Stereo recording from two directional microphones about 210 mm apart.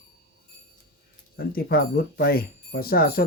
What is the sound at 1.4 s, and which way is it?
Speech, 45° left (ahead or behind).